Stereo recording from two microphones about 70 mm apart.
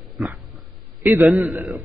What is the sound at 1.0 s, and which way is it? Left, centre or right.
Speech, right.